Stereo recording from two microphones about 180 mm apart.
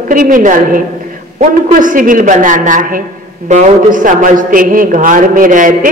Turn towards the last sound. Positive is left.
turn(degrees=-45)  # may be behind; listen again after turning